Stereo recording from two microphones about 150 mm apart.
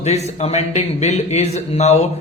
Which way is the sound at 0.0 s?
45° left (ahead or behind).